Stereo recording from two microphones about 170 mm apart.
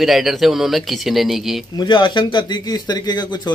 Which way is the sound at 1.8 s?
30° left (ahead or behind).